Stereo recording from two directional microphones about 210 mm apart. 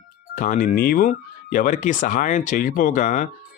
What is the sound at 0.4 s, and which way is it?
Speech, 40° left (ahead or behind).